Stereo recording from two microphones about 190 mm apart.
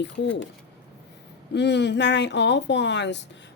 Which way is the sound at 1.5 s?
65° left (ahead or behind).